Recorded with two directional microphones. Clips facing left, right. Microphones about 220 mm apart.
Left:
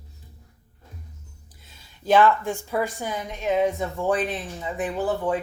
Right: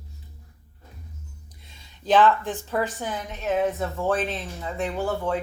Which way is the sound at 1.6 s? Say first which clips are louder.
Even; 5° left (ahead or behind).